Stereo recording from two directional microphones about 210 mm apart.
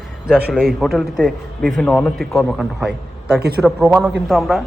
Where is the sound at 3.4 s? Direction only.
50° right (ahead or behind).